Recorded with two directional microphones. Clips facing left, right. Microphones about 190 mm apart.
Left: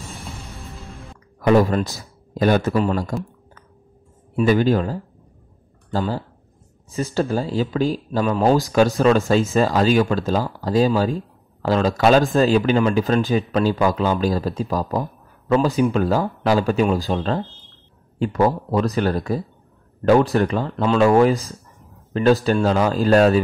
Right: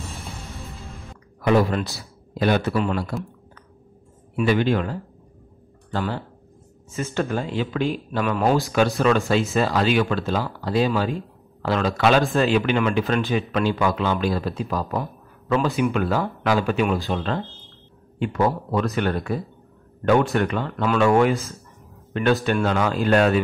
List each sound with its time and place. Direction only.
0.6 s music: centre (ahead or behind)
1.4 s a man's voice: 40° left (ahead or behind)
4.4 s speech: 40° left (ahead or behind)